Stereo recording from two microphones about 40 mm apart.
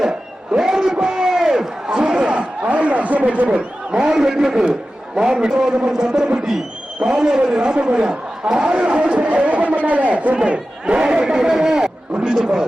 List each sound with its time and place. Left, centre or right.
0.5 s crowd: centre; by 3.6 s right
3.9 s a man's voice: right
10.3 s a man's voice: right